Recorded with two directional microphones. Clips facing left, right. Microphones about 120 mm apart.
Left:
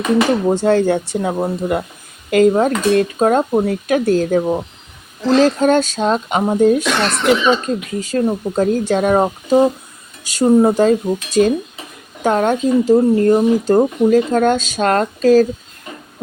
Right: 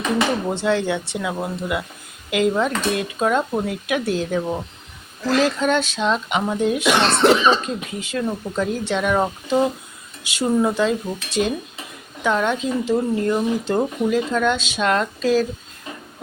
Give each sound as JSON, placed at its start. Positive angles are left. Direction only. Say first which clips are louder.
{"t": 0.5, "sound": "speech", "louder": "left 7 dB", "side_deg": 45}
{"t": 7.0, "sound": "speech", "louder": "even", "side_deg": -35}
{"t": 7.9, "sound": "speech", "louder": "left 8 dB", "side_deg": 40}